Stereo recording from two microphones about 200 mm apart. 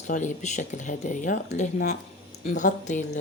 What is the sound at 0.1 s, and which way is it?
Speech, 40° left (ahead or behind).